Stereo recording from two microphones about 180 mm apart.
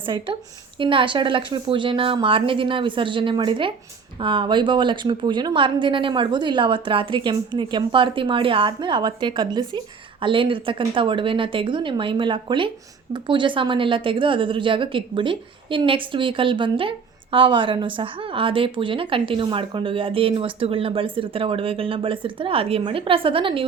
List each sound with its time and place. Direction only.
0.0 s a woman's voice: 30° right (ahead or behind)